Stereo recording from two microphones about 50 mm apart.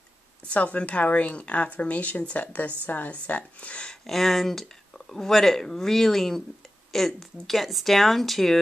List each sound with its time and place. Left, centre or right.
0.5 s speech: left
4.0 s speech: centre